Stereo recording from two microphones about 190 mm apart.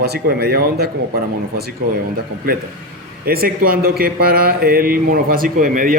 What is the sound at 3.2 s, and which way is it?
Speech, 50° right (ahead or behind).